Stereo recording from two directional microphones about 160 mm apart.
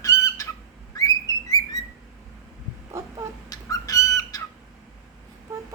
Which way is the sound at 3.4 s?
25° left (ahead or behind).